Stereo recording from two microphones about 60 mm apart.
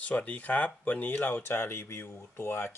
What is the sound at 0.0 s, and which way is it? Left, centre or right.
Speech, left.